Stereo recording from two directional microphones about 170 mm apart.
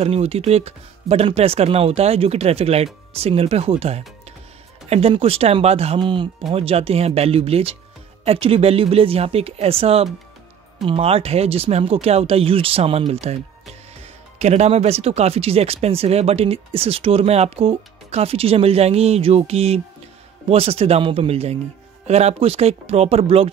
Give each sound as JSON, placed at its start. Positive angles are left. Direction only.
{"t": 0.0, "sound": "speech", "side_deg": -35}
{"t": 14.4, "sound": "speech", "side_deg": -40}